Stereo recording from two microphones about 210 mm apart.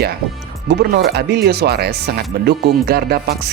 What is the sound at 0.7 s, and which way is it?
Speech, 55° right (ahead or behind).